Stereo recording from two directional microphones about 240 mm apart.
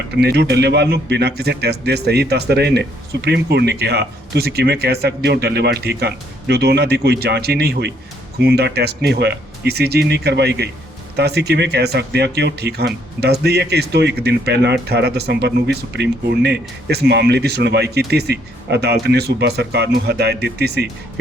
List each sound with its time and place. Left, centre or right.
0.2 s a man's voice: right